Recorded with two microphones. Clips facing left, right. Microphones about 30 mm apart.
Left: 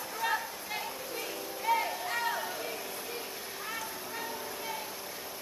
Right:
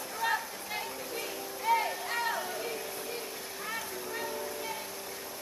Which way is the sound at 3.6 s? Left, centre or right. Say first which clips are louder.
Right 2 dB; centre.